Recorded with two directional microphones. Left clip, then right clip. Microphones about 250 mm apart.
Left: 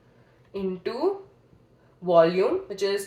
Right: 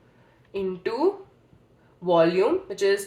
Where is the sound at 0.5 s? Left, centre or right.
Right.